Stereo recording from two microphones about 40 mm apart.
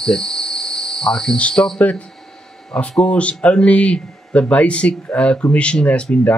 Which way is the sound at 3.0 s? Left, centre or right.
Left.